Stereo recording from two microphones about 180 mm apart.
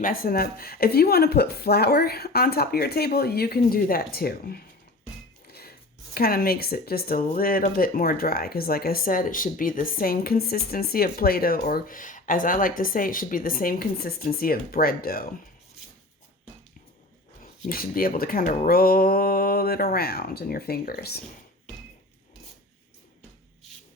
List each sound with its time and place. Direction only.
0.0 s speech: 55° left (ahead or behind)
5.5 s a sound: 60° left (ahead or behind)
6.1 s speech: 55° left (ahead or behind)
17.7 s speech: 55° left (ahead or behind)